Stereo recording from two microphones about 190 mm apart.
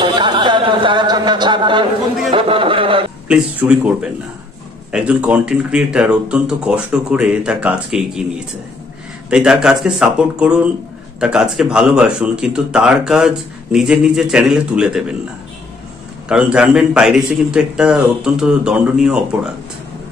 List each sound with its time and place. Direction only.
0.0 s music: 25° right (ahead or behind)
2.3 s speech: 30° right (ahead or behind)
3.3 s speech: 5° right (ahead or behind)
9.3 s speech: 5° right (ahead or behind)
16.3 s speech: 5° right (ahead or behind)